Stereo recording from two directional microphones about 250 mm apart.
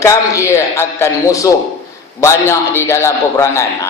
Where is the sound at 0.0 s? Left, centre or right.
Centre.